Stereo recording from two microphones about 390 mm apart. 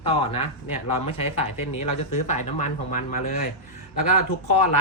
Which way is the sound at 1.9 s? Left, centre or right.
Left.